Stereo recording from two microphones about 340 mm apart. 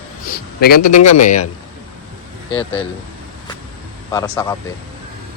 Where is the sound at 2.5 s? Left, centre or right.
Centre.